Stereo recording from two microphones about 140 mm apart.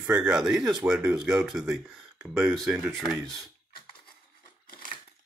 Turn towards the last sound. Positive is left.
turn(degrees=85)